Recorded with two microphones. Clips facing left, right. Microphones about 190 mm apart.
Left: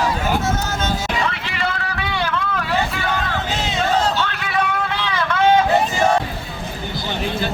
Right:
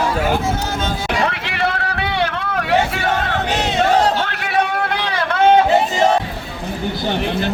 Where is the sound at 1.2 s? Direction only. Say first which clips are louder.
Right 4 dB; 60° right (ahead or behind).